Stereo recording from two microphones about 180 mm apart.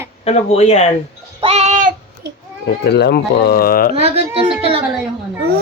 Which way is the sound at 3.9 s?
35° right (ahead or behind).